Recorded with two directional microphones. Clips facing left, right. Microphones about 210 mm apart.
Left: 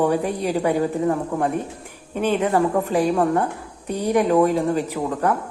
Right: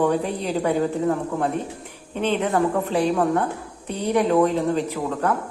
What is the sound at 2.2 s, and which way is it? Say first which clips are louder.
Speech: left 2 dB; 10° left (ahead or behind).